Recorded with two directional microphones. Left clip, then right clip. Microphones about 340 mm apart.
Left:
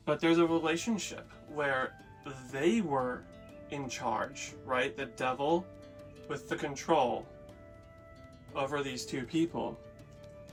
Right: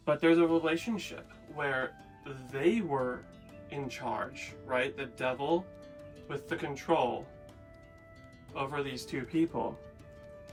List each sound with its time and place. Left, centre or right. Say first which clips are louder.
0.0 s speech: right 2 dB; centre
8.5 s speech: left 1 dB; centre